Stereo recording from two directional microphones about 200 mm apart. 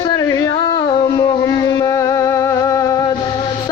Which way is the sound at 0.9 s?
20° left (ahead or behind).